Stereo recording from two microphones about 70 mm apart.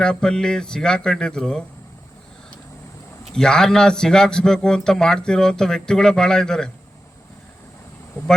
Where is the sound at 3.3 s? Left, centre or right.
Centre.